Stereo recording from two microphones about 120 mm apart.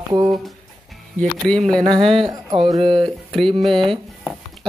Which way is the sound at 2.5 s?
55° right (ahead or behind).